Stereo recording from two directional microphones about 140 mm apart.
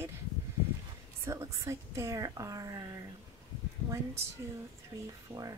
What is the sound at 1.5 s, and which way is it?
Speech, 20° right (ahead or behind).